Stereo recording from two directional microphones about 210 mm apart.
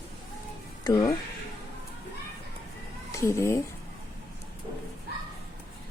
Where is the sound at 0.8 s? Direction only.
20° left (ahead or behind).